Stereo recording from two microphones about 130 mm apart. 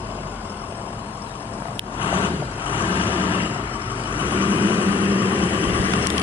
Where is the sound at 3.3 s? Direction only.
15° right (ahead or behind).